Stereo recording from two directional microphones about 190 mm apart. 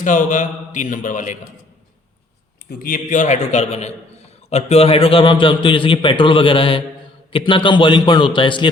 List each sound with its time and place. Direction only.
0.0 s a man's voice: 45° left (ahead or behind)
2.6 s a man's voice: 50° left (ahead or behind); by 8.7 s 25° left (ahead or behind)